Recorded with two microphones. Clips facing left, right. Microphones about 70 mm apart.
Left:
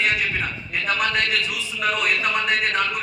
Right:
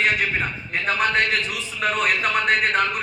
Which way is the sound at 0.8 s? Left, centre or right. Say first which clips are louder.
Right 2 dB; right.